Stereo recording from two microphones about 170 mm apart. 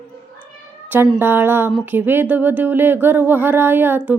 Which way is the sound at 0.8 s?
10° right (ahead or behind).